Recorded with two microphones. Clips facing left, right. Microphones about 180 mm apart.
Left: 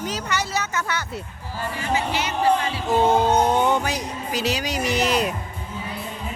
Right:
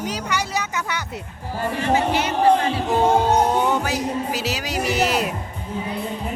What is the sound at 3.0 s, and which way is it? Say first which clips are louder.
Speech: right 1 dB; 10° right (ahead or behind).